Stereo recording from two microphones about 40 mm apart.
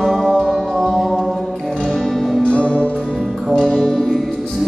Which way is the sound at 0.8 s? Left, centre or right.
Centre.